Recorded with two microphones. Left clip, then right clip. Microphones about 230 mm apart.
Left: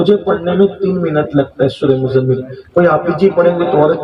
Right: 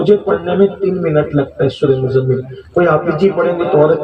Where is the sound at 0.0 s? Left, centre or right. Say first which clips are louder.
Even; left.